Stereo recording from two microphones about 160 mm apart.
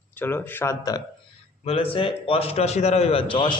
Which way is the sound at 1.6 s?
35° left (ahead or behind).